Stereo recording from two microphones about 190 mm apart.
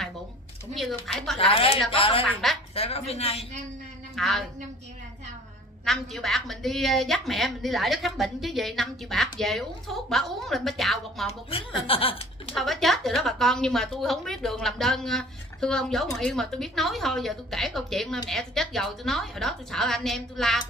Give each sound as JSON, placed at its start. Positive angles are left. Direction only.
{"t": 0.7, "sound": "a woman's voice", "side_deg": 0}
{"t": 1.5, "sound": "speech", "side_deg": 30}
{"t": 2.2, "sound": "a woman's voice", "side_deg": 0}
{"t": 2.7, "sound": "a woman's voice", "side_deg": 30}
{"t": 4.1, "sound": "a woman's voice", "side_deg": 0}
{"t": 5.9, "sound": "a woman's voice", "side_deg": 0}
{"t": 11.5, "sound": "speech", "side_deg": 30}
{"t": 12.5, "sound": "a woman's voice", "side_deg": 0}